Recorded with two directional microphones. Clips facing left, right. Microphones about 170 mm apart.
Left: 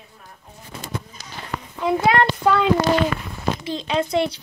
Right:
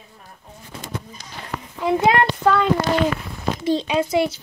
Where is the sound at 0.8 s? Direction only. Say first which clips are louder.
Left 1 dB; 5° left (ahead or behind).